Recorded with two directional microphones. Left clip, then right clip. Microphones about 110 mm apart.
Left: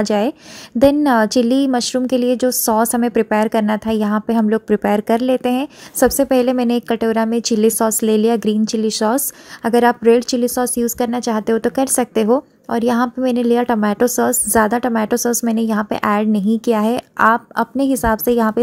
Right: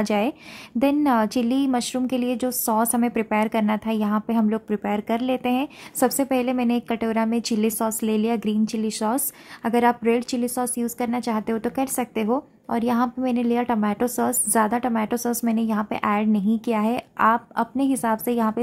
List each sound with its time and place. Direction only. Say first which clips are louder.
0.0 s a woman's voice: left 6 dB; 20° left (ahead or behind)